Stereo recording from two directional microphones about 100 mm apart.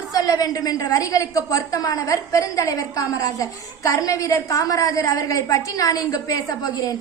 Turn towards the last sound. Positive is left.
turn(degrees=40)  # may be behind; listen again after turning